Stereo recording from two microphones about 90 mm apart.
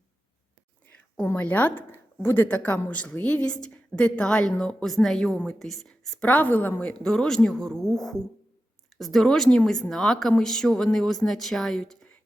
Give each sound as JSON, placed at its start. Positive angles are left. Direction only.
{"t": 1.2, "sound": "speech", "side_deg": 20}
{"t": 6.2, "sound": "speech", "side_deg": 15}
{"t": 7.0, "sound": "speech", "side_deg": 5}